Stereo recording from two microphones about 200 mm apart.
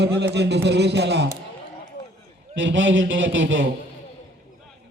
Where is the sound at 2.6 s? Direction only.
70° right (ahead or behind).